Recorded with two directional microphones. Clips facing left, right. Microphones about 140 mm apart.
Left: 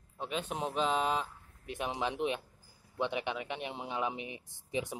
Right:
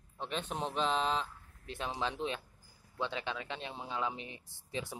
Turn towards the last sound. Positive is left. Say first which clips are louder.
# left 4 dB
turn(degrees=20)  # may be behind; listen again after turning